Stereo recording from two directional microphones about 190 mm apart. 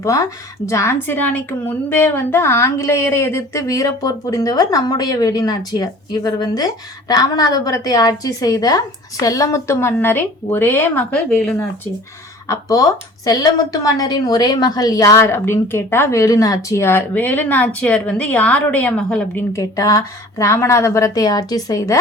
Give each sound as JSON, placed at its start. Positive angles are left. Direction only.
{"t": 0.0, "sound": "a woman's voice", "side_deg": 15}
{"t": 12.5, "sound": "a woman's voice", "side_deg": 20}